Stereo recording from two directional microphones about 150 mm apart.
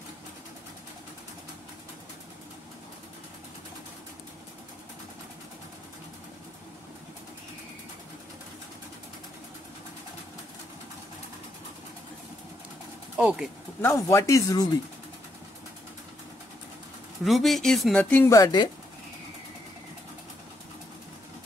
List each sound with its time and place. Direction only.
13.2 s speech: 5° right (ahead or behind)
13.7 s speech: 15° left (ahead or behind)
17.2 s speech: centre (ahead or behind)
18.1 s speech: 15° left (ahead or behind)
18.4 s speech: 30° left (ahead or behind)